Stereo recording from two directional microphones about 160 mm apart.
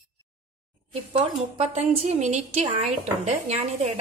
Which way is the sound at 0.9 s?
40° right (ahead or behind).